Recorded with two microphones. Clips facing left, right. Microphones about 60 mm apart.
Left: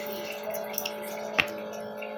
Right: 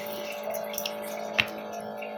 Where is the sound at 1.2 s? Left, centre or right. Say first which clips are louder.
Left 2 dB; centre.